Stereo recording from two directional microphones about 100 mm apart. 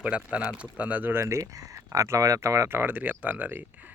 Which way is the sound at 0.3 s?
10° right (ahead or behind).